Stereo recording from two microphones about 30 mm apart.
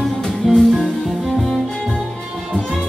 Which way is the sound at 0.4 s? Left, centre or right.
Centre.